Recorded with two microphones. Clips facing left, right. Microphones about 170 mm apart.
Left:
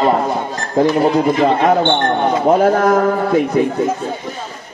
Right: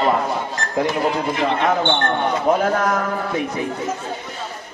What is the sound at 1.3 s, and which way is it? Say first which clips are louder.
Speech: left 6 dB; 50° left (ahead or behind).